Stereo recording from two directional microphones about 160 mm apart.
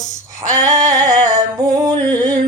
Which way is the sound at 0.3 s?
20° right (ahead or behind).